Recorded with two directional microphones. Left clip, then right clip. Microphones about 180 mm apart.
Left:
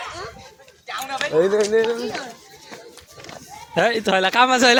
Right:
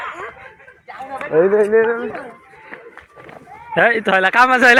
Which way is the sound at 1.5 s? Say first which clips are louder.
Right 4 dB; 25° right (ahead or behind).